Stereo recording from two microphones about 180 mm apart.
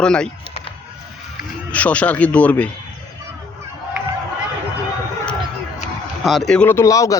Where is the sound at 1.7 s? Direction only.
10° left (ahead or behind).